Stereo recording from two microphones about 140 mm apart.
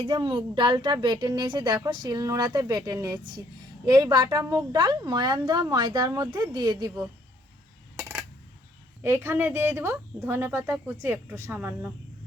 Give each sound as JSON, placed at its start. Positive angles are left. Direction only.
{"t": 0.0, "sound": "a woman's voice", "side_deg": -35}
{"t": 7.9, "sound": "coin", "side_deg": -15}
{"t": 9.0, "sound": "speech", "side_deg": -15}